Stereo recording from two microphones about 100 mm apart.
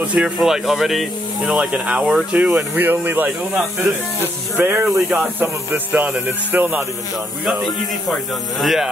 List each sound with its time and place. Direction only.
0.1 s speech: 5° right (ahead or behind)
4.6 s speech: 20° right (ahead or behind)
7.4 s speech: centre (ahead or behind)